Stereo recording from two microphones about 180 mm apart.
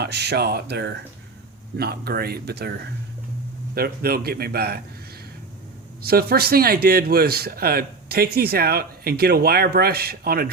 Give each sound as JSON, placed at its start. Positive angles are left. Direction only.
{"t": 0.0, "sound": "speech", "side_deg": -65}
{"t": 3.8, "sound": "speech", "side_deg": -55}
{"t": 6.1, "sound": "speech", "side_deg": -60}